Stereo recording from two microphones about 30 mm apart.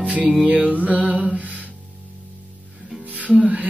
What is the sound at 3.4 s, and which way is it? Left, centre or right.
Music, right.